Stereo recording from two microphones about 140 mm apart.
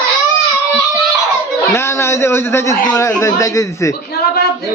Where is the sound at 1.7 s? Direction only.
20° left (ahead or behind).